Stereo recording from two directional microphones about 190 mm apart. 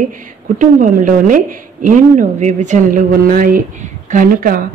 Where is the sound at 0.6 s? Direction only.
45° right (ahead or behind).